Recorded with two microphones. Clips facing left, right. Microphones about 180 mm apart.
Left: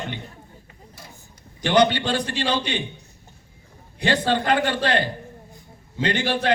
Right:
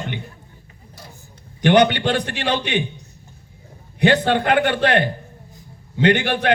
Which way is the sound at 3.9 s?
60° right (ahead or behind).